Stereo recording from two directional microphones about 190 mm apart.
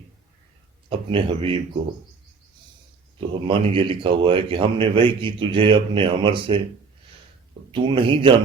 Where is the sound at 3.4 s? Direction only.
30° right (ahead or behind).